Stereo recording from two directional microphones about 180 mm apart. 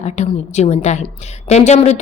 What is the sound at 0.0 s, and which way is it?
A woman's voice, 40° left (ahead or behind).